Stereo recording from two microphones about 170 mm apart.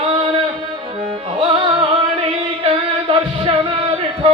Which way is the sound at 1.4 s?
30° right (ahead or behind).